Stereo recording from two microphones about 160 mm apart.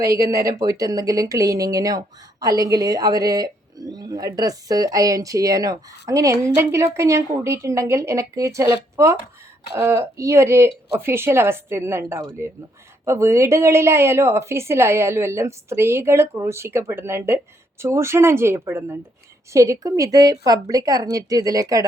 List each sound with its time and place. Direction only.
0.0 s a woman's voice: 20° right (ahead or behind)